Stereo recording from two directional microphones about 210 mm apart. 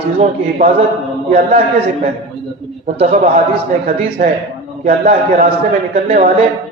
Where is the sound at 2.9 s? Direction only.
35° right (ahead or behind).